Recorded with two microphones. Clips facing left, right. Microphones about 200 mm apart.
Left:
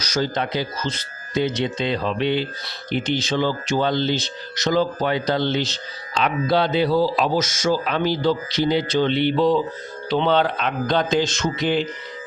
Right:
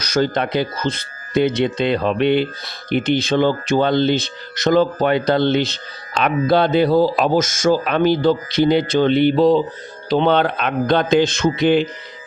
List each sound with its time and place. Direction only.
0.0 s speech: 55° right (ahead or behind); by 9.6 s 35° right (ahead or behind)
10.1 s speech: 50° right (ahead or behind)